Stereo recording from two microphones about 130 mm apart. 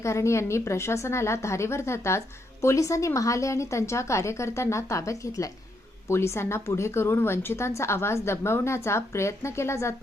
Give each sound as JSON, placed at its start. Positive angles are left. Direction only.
{"t": 0.0, "sound": "a woman's voice", "side_deg": 20}